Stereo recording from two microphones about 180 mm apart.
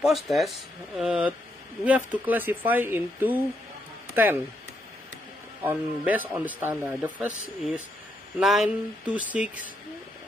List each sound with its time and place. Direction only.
0.0 s a man's voice: centre (ahead or behind)
5.6 s a man's voice: 10° right (ahead or behind)